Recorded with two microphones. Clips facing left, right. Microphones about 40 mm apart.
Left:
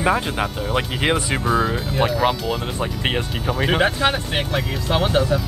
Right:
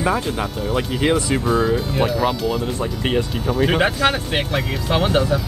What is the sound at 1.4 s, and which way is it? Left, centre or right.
Speech, centre.